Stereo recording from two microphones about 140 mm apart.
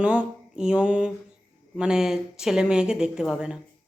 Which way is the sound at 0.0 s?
10° right (ahead or behind).